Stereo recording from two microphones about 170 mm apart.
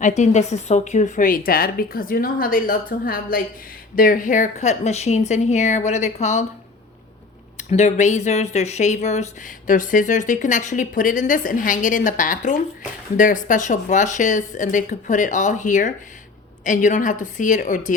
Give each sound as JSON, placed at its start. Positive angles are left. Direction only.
{"t": 0.0, "sound": "a woman's voice", "side_deg": 45}
{"t": 7.7, "sound": "speech", "side_deg": 45}